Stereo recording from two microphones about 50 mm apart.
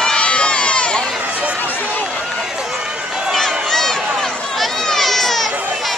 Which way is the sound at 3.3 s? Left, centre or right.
Centre.